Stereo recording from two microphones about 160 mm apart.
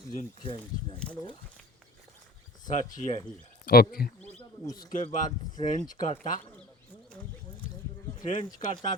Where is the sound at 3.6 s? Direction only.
70° left (ahead or behind).